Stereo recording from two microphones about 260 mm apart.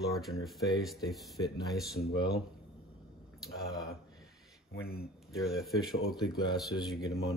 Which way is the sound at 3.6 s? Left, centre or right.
Centre.